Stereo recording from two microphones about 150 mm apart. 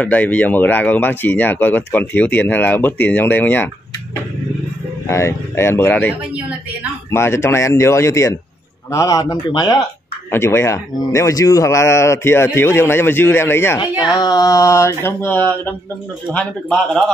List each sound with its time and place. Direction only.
0.0 s speech: 10° left (ahead or behind)
5.0 s speech: 15° left (ahead or behind)
13.7 s speech: 30° left (ahead or behind); by 17.0 s 5° left (ahead or behind)